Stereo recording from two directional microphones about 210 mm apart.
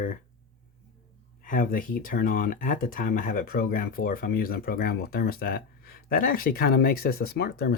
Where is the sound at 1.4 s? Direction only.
40° left (ahead or behind).